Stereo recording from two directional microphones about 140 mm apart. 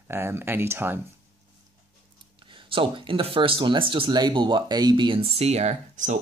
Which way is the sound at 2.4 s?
40° right (ahead or behind).